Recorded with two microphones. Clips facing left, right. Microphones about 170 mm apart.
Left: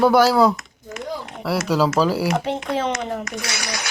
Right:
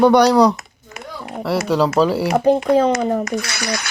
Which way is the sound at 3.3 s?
60° right (ahead or behind).